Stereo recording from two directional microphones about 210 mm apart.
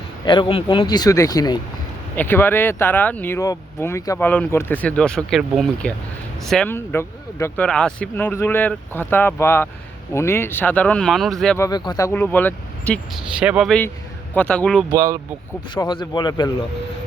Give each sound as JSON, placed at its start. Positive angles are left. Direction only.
{"t": 0.3, "sound": "speech", "side_deg": 25}
{"t": 11.5, "sound": "speech", "side_deg": 15}
{"t": 13.4, "sound": "speech", "side_deg": -5}
{"t": 14.9, "sound": "speech", "side_deg": -15}
{"t": 15.7, "sound": "speech", "side_deg": 20}